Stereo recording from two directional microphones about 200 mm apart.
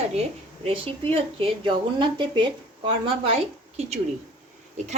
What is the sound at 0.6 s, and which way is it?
A woman's voice, 30° right (ahead or behind).